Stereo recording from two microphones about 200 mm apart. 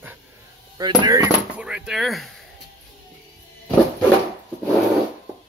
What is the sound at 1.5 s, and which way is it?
Speech, 5° right (ahead or behind).